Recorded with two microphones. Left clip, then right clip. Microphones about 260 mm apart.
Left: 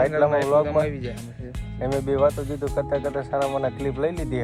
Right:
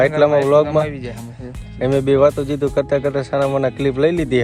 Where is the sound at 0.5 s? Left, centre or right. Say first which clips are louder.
Right 6 dB; right.